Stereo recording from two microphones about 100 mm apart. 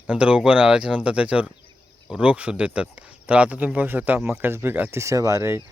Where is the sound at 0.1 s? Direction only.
10° right (ahead or behind); by 5.6 s 25° right (ahead or behind).